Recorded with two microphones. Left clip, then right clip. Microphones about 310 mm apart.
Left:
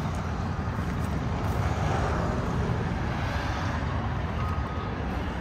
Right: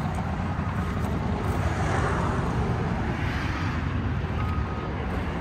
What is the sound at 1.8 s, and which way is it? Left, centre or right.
Vehicle, right.